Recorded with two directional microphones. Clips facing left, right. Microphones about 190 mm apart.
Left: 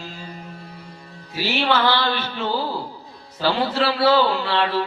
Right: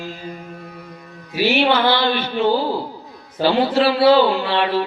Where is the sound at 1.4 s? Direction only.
15° right (ahead or behind).